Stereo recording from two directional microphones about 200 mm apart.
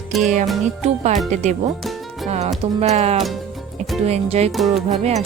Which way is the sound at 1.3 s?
35° right (ahead or behind).